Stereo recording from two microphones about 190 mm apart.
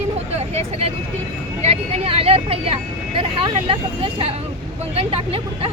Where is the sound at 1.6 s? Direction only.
35° right (ahead or behind).